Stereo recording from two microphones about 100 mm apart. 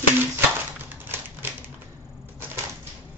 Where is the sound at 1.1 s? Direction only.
20° right (ahead or behind).